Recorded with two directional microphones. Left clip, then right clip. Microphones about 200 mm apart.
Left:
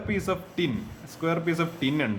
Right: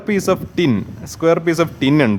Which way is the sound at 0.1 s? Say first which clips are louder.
Right 12 dB; 50° right (ahead or behind).